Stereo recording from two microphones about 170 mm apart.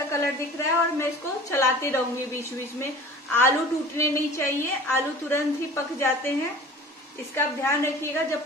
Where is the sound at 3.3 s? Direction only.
15° left (ahead or behind).